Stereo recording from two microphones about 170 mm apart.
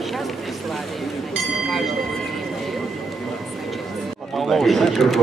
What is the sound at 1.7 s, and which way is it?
Train, centre (ahead or behind).